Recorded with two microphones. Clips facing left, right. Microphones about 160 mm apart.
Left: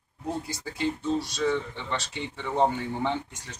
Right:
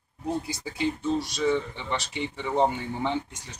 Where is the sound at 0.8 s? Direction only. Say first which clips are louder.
Right 1 dB; 15° right (ahead or behind).